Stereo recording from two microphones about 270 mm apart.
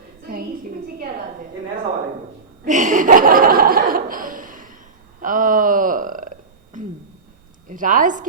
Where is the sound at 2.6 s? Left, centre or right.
Right.